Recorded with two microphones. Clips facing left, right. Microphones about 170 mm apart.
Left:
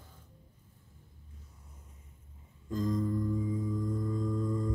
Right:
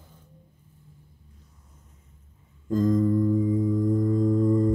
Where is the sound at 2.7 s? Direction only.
50° right (ahead or behind).